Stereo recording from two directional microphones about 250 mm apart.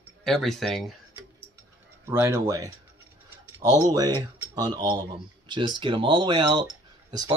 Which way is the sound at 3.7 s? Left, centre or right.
Centre.